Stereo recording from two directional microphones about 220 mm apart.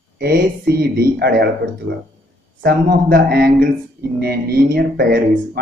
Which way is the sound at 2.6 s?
40° right (ahead or behind).